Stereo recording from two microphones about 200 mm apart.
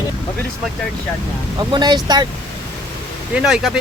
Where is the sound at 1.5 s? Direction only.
20° right (ahead or behind).